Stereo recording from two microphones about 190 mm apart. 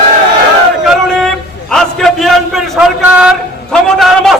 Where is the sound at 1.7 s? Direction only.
Centre (ahead or behind).